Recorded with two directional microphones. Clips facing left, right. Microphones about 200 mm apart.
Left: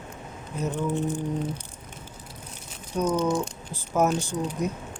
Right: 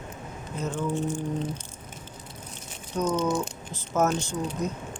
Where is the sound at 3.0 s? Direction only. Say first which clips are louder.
Left 1 dB; 10° left (ahead or behind).